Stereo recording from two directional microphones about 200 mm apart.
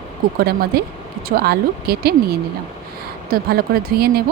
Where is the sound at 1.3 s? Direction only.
50° right (ahead or behind).